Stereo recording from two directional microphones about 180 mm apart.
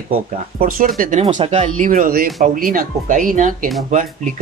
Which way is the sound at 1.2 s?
35° right (ahead or behind).